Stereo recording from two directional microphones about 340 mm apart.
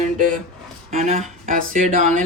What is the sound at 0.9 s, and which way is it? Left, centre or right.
Speech, right.